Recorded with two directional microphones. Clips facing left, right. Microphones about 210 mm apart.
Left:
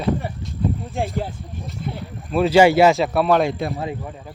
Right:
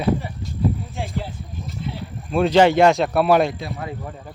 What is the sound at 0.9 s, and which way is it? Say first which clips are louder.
Speech: left 4 dB; 50° left (ahead or behind).